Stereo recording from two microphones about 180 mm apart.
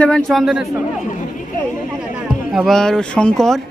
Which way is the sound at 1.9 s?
5° right (ahead or behind).